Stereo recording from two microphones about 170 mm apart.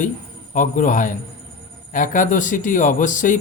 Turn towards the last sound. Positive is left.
turn(degrees=50)  # may be behind; listen again after turning